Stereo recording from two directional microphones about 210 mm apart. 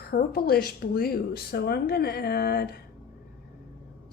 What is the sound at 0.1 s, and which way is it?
A woman's voice, 45° left (ahead or behind).